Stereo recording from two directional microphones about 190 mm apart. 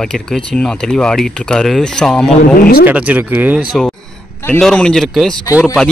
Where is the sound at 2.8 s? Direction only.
10° right (ahead or behind).